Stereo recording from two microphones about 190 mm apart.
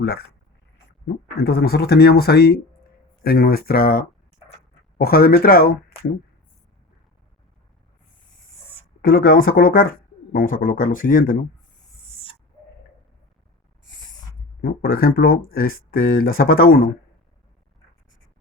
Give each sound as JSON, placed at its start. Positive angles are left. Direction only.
{"t": 0.0, "sound": "speech", "side_deg": 55}
{"t": 9.2, "sound": "speech", "side_deg": 50}
{"t": 14.6, "sound": "speech", "side_deg": 50}